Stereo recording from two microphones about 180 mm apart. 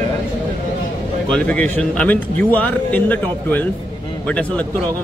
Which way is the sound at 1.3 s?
5° left (ahead or behind).